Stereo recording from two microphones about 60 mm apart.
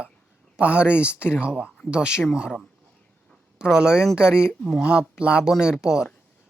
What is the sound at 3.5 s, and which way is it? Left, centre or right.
Speech, centre.